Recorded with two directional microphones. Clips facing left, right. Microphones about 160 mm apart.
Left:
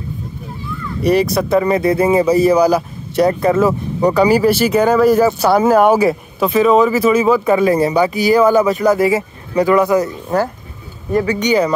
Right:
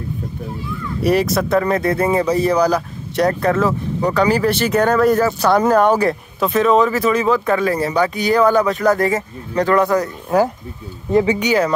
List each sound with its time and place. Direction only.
1.0 s speech: centre (ahead or behind)
11.1 s speech: 20° right (ahead or behind)
11.3 s speech: 5° right (ahead or behind)